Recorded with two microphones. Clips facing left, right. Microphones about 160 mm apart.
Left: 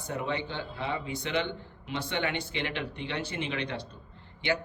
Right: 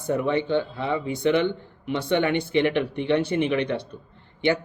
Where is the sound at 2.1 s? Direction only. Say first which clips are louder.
Right 12 dB; 55° right (ahead or behind).